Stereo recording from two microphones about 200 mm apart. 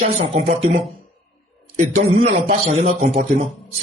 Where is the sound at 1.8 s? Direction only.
40° right (ahead or behind).